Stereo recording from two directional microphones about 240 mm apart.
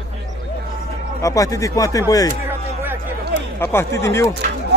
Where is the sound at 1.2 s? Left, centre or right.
Centre.